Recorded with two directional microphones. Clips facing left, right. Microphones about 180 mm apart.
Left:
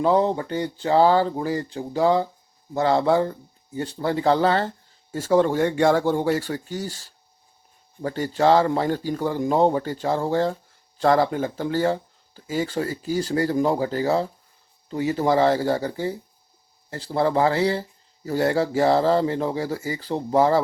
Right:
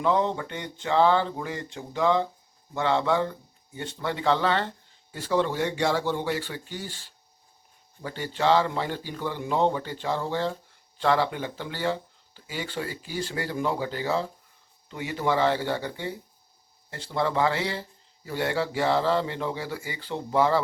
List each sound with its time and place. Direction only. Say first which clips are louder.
0.0 s speech: left 5 dB; 35° left (ahead or behind)